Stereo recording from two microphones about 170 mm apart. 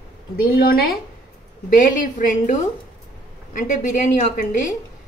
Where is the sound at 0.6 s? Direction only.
60° left (ahead or behind).